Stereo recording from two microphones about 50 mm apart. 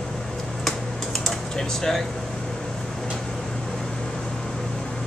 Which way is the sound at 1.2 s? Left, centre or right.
Centre.